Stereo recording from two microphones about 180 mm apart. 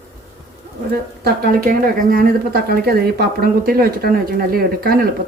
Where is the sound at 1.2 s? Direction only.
55° right (ahead or behind).